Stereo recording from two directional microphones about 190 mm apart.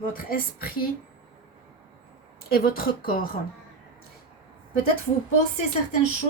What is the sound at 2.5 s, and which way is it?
Speech, 50° left (ahead or behind).